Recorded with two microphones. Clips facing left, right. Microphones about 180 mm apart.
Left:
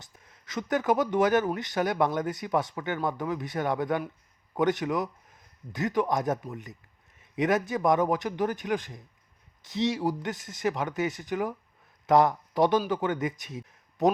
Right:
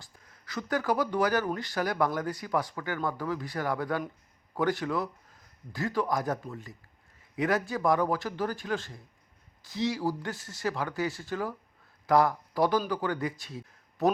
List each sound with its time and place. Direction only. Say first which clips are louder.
0.0 s a man's voice: left 1 dB; 20° left (ahead or behind)